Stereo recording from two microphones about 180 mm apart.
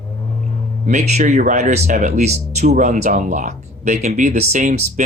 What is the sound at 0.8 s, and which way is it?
Speech, 40° right (ahead or behind).